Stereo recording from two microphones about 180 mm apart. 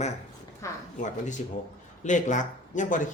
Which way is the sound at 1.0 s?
45° left (ahead or behind).